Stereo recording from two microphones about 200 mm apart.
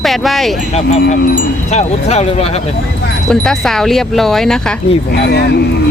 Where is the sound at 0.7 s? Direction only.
35° left (ahead or behind).